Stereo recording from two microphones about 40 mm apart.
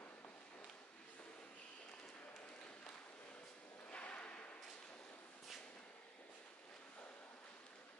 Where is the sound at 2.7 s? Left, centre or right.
Left.